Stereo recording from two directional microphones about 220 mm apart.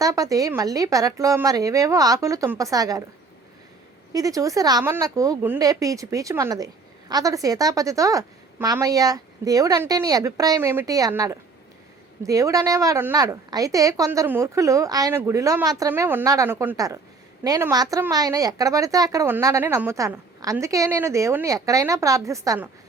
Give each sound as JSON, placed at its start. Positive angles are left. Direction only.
{"t": 0.0, "sound": "a woman's voice", "side_deg": -15}
{"t": 4.1, "sound": "a woman's voice", "side_deg": -15}